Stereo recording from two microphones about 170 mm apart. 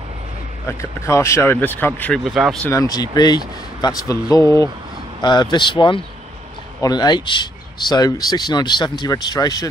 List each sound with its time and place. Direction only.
0.7 s speech: 15° left (ahead or behind)
2.2 s speech: 5° right (ahead or behind)
2.6 s a man's voice: 20° left (ahead or behind)